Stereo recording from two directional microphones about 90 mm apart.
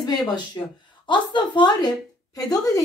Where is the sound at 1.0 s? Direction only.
60° left (ahead or behind).